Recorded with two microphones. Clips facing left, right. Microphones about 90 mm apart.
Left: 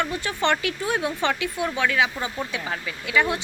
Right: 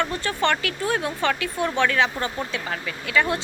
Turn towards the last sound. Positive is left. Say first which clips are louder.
# even
turn(degrees=15)  # may be behind; listen again after turning